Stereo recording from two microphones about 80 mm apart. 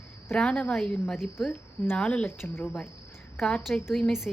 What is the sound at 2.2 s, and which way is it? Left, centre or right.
Speech, left.